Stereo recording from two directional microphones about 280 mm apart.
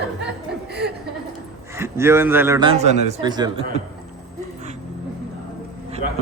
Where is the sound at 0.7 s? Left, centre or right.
Right.